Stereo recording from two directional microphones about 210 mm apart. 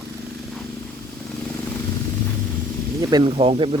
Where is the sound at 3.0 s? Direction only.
20° right (ahead or behind).